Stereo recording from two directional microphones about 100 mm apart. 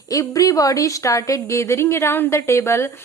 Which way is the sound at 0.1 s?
35° left (ahead or behind).